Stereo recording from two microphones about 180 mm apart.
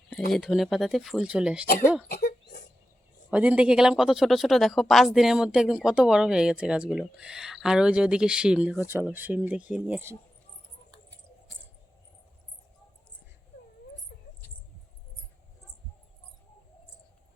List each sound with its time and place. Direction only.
0.3 s speech: centre (ahead or behind)
2.0 s a sound: 65° left (ahead or behind)
3.3 s speech: 5° right (ahead or behind)